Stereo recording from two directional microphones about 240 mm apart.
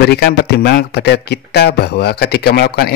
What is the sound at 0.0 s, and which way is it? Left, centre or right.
Speech, left.